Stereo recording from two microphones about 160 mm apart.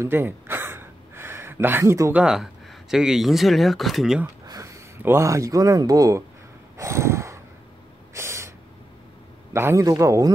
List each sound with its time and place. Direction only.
0.0 s a sound: 15° right (ahead or behind)
2.2 s speech: centre (ahead or behind)
4.5 s speech: 20° right (ahead or behind)
6.8 s a sound: 20° right (ahead or behind)
8.1 s owl: 15° right (ahead or behind)
9.5 s a man's voice: 15° right (ahead or behind)